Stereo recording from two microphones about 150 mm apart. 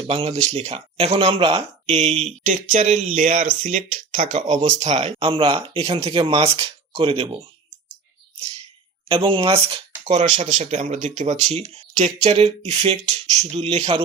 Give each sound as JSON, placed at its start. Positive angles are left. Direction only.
{"t": 0.0, "sound": "speech", "side_deg": -40}
{"t": 5.3, "sound": "speech", "side_deg": -40}
{"t": 8.4, "sound": "a sound", "side_deg": -40}
{"t": 9.0, "sound": "speech", "side_deg": -35}